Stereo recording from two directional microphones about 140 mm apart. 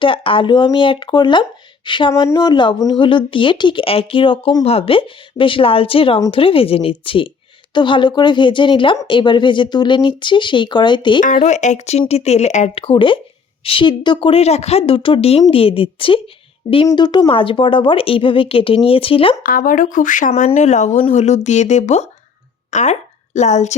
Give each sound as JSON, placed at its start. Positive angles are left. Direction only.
{"t": 0.0, "sound": "speech", "side_deg": 40}
{"t": 11.4, "sound": "speech", "side_deg": 55}
{"t": 19.4, "sound": "speech", "side_deg": 90}